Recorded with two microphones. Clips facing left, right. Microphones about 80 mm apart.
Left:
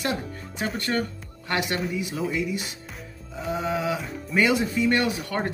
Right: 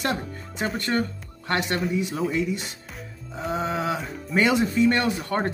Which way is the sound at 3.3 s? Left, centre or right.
Right.